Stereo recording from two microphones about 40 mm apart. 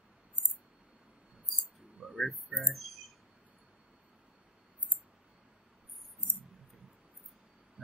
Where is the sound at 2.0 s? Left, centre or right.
Centre.